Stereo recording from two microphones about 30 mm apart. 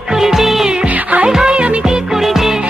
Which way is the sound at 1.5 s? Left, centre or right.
Right.